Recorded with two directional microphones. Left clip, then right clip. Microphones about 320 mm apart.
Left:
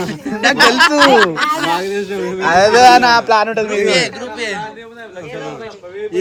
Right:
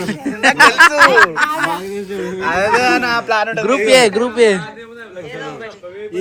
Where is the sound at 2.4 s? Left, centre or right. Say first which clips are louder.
Left 6 dB; left.